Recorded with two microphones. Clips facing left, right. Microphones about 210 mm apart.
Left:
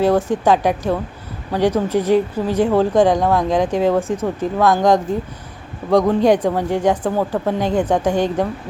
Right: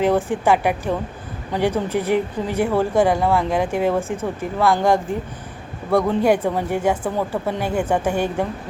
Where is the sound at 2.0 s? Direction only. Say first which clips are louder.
Left 5 dB; 10° right (ahead or behind).